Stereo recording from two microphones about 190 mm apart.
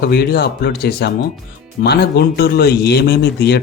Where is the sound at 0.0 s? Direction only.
55° left (ahead or behind).